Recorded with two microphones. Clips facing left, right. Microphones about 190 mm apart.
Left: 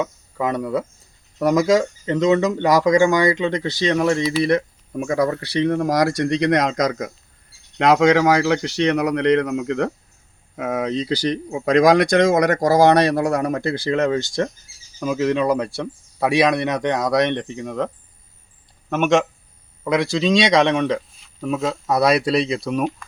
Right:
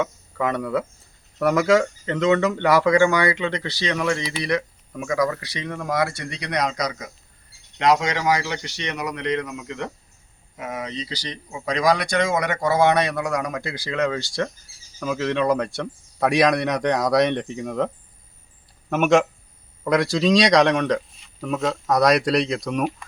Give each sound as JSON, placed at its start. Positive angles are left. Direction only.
{"t": 0.3, "sound": "speech", "side_deg": 15}
{"t": 2.7, "sound": "speech", "side_deg": 40}
{"t": 3.0, "sound": "speech", "side_deg": 15}
{"t": 3.5, "sound": "speech", "side_deg": 45}
{"t": 3.8, "sound": "speech", "side_deg": 30}
{"t": 7.8, "sound": "speech", "side_deg": 60}